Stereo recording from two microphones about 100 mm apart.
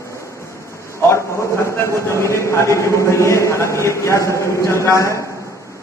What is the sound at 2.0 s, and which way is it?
A man's voice, 30° left (ahead or behind).